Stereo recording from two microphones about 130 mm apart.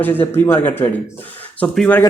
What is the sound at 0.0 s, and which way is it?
Speech, 15° left (ahead or behind).